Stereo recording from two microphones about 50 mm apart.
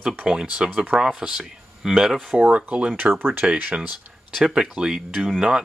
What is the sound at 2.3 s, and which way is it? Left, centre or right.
Speech, right.